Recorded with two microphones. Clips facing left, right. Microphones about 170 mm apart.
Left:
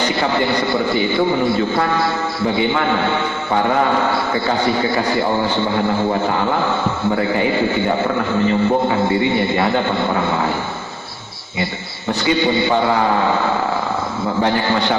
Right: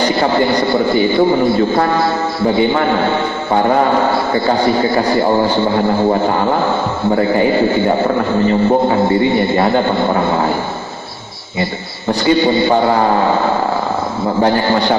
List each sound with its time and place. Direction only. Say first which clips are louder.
0.0 s a man's voice: right 5 dB; 35° right (ahead or behind)
12.2 s a man's voice: right 5 dB; 40° right (ahead or behind)